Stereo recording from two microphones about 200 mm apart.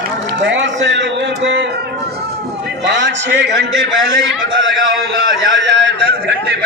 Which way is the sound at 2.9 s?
60° right (ahead or behind).